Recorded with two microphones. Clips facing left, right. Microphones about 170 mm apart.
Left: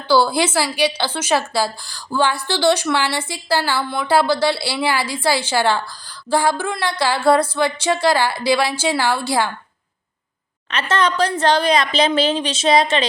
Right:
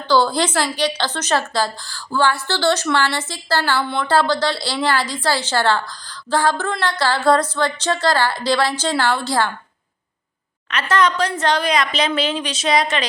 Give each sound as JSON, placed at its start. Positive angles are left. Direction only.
{"t": 0.1, "sound": "a woman's voice", "side_deg": 10}
{"t": 10.7, "sound": "a woman's voice", "side_deg": 25}